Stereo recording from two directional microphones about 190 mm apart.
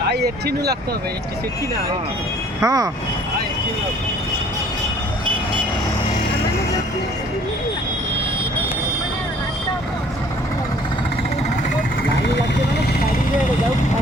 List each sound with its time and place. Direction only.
0.1 s speech: 60° right (ahead or behind)
2.6 s speech: 20° right (ahead or behind)